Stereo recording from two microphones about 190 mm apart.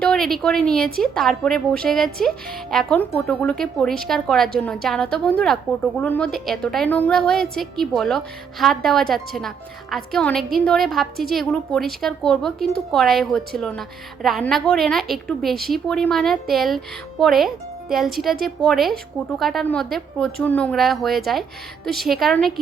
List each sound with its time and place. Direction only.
0.0 s a woman's voice: centre (ahead or behind)